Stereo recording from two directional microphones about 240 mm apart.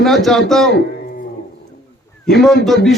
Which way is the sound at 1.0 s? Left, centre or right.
Left.